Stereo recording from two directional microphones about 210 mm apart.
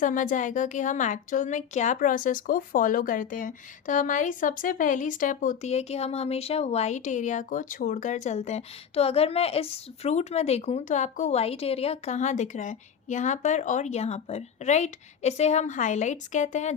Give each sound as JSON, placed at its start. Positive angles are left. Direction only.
{"t": 0.0, "sound": "a woman's voice", "side_deg": 40}